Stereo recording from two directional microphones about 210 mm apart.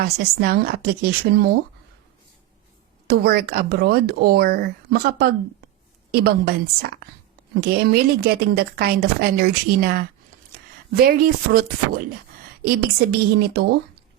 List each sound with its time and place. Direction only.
0.0 s a woman's voice: 50° right (ahead or behind)
3.1 s a woman's voice: 50° right (ahead or behind)
7.6 s a woman's voice: 50° right (ahead or behind)